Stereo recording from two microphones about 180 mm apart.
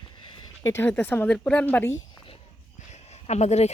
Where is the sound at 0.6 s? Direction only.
15° left (ahead or behind).